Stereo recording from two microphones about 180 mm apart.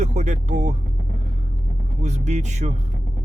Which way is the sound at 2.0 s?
40° right (ahead or behind).